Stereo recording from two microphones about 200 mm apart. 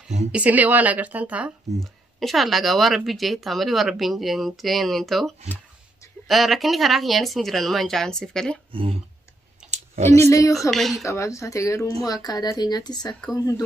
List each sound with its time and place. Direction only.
0.3 s a woman's voice: 5° right (ahead or behind)
8.7 s speech: 25° right (ahead or behind)
9.7 s clicking: 35° right (ahead or behind)
10.3 s speech: 15° left (ahead or behind)
10.7 s speech: centre (ahead or behind)
11.1 s speech: 15° left (ahead or behind)